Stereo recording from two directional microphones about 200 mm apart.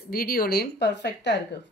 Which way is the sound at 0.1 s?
50° left (ahead or behind).